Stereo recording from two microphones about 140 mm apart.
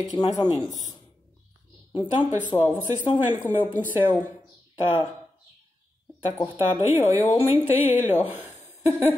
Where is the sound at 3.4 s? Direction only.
10° left (ahead or behind).